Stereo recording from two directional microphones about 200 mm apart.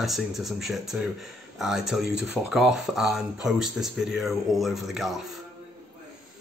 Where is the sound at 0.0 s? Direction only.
Centre (ahead or behind).